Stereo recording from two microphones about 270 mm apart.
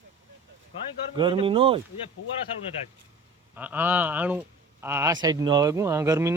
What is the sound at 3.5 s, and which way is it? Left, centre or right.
Speech, centre.